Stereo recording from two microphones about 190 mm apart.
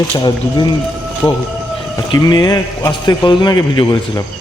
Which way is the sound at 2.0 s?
20° left (ahead or behind).